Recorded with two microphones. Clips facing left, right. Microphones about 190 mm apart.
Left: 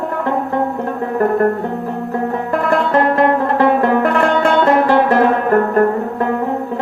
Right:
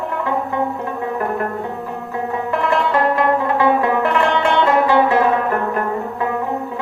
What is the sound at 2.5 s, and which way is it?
Music, 45° left (ahead or behind).